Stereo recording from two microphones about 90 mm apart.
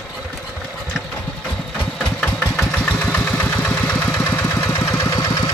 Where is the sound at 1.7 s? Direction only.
15° left (ahead or behind).